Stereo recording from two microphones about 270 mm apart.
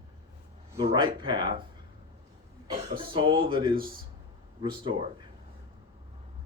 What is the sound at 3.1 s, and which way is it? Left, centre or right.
Speech, centre.